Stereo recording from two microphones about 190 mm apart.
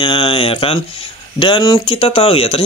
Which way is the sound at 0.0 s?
25° left (ahead or behind).